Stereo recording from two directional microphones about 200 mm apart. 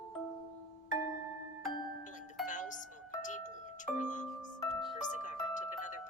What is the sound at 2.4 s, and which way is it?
Music, 40° left (ahead or behind).